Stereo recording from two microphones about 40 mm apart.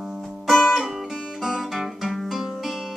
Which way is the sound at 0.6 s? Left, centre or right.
Centre.